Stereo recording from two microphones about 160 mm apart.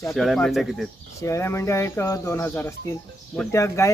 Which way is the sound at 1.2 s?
20° left (ahead or behind).